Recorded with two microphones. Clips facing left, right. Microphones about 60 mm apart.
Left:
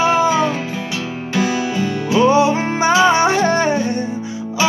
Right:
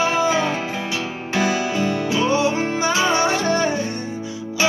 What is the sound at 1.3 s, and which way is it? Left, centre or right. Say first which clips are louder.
Music: left 2 dB; right.